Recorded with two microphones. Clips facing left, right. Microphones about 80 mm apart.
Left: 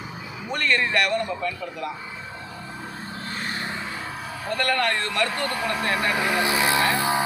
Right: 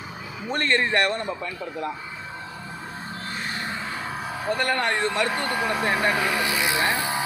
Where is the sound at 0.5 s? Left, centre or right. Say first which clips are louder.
Right 1 dB; right.